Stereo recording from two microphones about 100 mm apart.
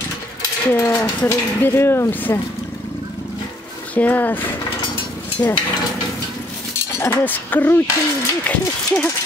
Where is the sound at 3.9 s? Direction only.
15° left (ahead or behind).